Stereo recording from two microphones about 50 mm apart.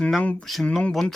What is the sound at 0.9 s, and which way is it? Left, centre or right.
Speech, centre.